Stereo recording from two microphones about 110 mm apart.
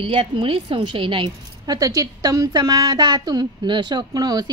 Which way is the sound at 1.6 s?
35° right (ahead or behind).